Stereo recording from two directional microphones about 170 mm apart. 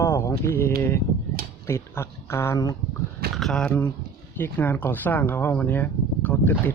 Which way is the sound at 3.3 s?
Centre (ahead or behind).